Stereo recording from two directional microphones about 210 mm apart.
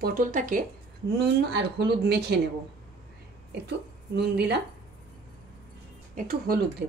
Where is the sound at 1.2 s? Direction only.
55° right (ahead or behind).